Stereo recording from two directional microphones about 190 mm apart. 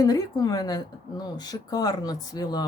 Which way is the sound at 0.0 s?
20° left (ahead or behind).